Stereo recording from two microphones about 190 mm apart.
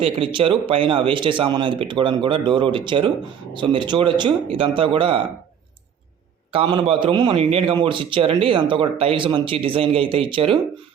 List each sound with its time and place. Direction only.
0.0 s a man's voice: 30° right (ahead or behind)
6.5 s a man's voice: 25° right (ahead or behind)